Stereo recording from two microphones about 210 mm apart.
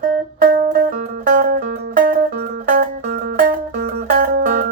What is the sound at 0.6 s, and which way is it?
Music, 40° right (ahead or behind).